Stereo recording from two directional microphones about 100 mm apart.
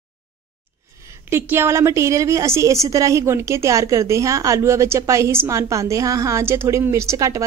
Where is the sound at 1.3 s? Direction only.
25° right (ahead or behind).